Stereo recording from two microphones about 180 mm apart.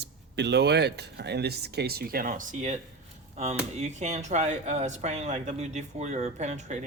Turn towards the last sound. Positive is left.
turn(degrees=-40)  # may be behind; listen again after turning